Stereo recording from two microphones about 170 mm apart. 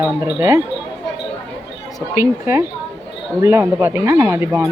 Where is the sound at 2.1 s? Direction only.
15° right (ahead or behind).